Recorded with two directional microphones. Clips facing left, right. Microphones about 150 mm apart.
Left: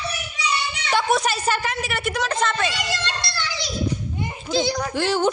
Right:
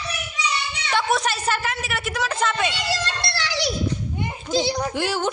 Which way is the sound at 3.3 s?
80° right.